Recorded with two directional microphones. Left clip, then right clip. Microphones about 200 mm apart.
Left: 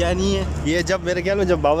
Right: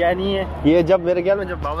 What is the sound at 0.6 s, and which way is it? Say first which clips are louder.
Speech: right 7 dB; 15° right (ahead or behind).